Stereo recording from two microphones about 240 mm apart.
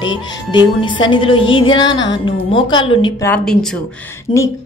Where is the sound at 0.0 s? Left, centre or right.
Centre.